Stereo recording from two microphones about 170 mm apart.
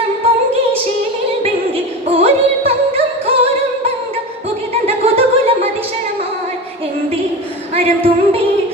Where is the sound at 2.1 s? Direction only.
35° right (ahead or behind).